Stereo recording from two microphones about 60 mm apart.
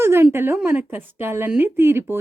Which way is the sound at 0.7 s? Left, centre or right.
Right.